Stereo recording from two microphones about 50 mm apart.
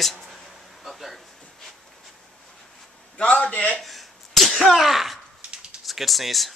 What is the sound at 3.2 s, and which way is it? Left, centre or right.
Speech, left.